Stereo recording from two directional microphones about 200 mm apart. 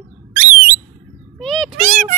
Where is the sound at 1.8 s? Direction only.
40° right (ahead or behind).